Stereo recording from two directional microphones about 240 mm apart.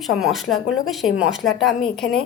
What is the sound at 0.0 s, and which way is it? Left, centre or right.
Speech, centre.